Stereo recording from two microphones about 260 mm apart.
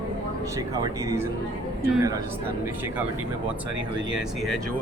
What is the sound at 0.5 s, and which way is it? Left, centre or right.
Speech, centre.